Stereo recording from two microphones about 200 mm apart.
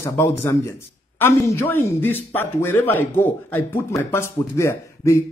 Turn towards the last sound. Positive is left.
turn(degrees=15)  # may be behind; listen again after turning